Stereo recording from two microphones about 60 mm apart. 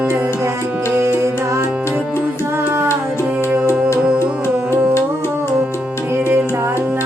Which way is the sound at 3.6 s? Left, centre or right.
Left.